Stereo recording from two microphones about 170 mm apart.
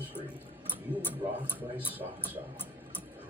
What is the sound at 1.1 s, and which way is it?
Speech, 10° left (ahead or behind).